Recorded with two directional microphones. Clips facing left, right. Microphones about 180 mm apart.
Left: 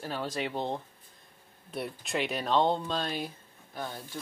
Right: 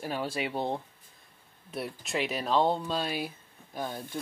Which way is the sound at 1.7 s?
Centre (ahead or behind).